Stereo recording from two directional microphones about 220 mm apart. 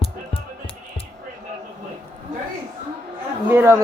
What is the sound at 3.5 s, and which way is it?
Speech, 10° right (ahead or behind).